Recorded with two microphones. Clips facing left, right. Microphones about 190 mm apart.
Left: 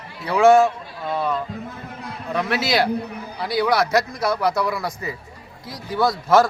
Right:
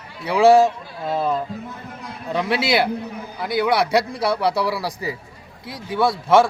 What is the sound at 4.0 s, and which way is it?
A man's voice, 30° right (ahead or behind).